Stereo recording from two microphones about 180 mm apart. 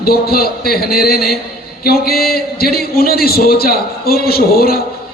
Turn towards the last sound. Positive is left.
turn(degrees=55)  # may be behind; listen again after turning